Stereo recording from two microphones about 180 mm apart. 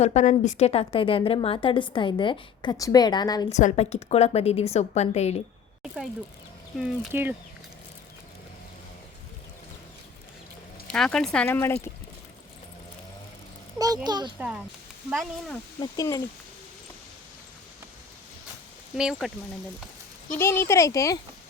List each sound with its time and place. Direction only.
0.0 s a woman's voice: 40° left (ahead or behind); by 3.5 s 25° left (ahead or behind)
3.5 s a woman's voice: 40° left (ahead or behind)
5.8 s speech: centre (ahead or behind)
7.1 s speech: 10° right (ahead or behind)
10.8 s speech: 5° left (ahead or behind)
13.7 s a child's voice: 20° right (ahead or behind)
14.3 s speech: 5° right (ahead or behind)
15.8 s a woman's voice: 20° left (ahead or behind)
18.9 s speech: 5° right (ahead or behind)
20.3 s speech: 15° left (ahead or behind)